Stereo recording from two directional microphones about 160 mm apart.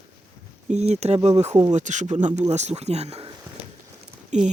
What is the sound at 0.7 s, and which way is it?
Speech, 45° right (ahead or behind).